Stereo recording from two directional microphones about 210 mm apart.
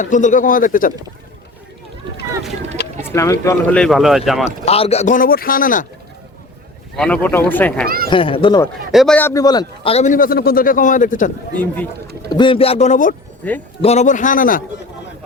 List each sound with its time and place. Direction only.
0.0 s a man's voice: 35° left (ahead or behind)
3.0 s speech: 15° left (ahead or behind)
4.4 s a man's voice: 30° left (ahead or behind)
6.9 s speech: 5° left (ahead or behind)
7.9 s speech: 45° right (ahead or behind)
8.1 s speech: 25° left (ahead or behind)
8.9 s a man's voice: centre (ahead or behind); by 11.3 s 40° left (ahead or behind)
11.5 s speech: 5° left (ahead or behind)
12.4 s a man's voice: 25° left (ahead or behind); by 14.6 s 40° left (ahead or behind)